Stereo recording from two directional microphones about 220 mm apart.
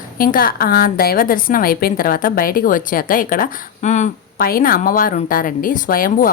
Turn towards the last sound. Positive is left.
turn(degrees=40)  # may be behind; listen again after turning